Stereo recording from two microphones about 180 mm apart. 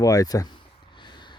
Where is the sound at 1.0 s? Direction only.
25° left (ahead or behind).